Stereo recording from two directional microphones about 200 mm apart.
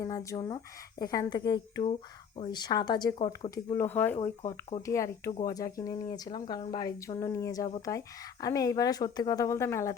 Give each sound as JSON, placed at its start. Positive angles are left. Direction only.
{"t": 0.0, "sound": "speech", "side_deg": 15}
{"t": 3.8, "sound": "speech", "side_deg": 10}
{"t": 4.2, "sound": "speech", "side_deg": 20}